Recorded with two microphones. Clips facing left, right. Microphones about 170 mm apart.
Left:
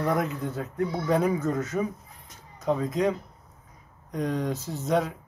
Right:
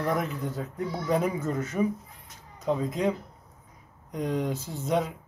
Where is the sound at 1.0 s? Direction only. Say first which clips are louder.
Left 1 dB; 10° right (ahead or behind).